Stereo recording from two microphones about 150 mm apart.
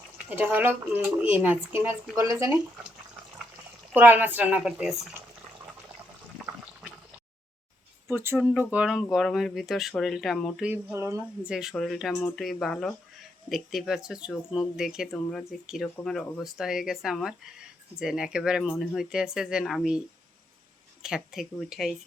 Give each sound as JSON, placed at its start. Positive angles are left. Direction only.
{"t": 0.3, "sound": "speech", "side_deg": -10}
{"t": 3.9, "sound": "speech", "side_deg": -15}
{"t": 8.0, "sound": "speech", "side_deg": -15}
{"t": 10.7, "sound": "speech", "side_deg": -15}
{"t": 11.5, "sound": "speech", "side_deg": -5}
{"t": 21.0, "sound": "speech", "side_deg": -5}